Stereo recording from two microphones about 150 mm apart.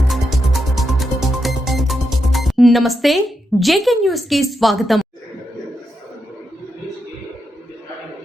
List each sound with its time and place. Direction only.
0.1 s music: centre (ahead or behind)